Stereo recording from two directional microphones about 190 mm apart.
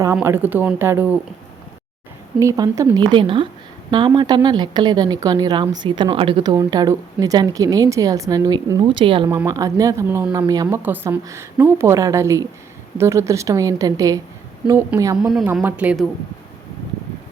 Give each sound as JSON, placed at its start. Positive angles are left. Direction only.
{"t": 0.0, "sound": "speech", "side_deg": -15}
{"t": 2.4, "sound": "speech", "side_deg": -15}
{"t": 15.2, "sound": "a woman's voice", "side_deg": 0}